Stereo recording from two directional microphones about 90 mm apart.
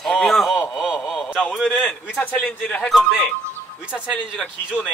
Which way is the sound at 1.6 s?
15° left (ahead or behind).